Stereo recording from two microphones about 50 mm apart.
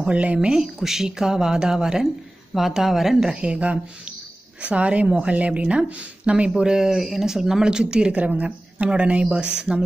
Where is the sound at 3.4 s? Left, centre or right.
Right.